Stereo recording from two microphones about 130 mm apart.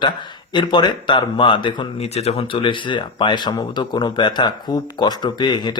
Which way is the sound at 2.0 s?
55° left (ahead or behind).